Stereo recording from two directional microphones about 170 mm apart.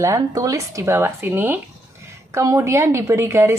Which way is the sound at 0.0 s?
20° right (ahead or behind).